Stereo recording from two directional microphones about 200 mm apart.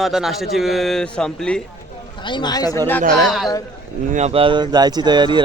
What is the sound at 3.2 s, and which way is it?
Speech, centre (ahead or behind).